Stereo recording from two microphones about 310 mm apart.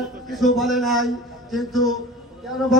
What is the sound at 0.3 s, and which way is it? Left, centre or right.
Speech, centre.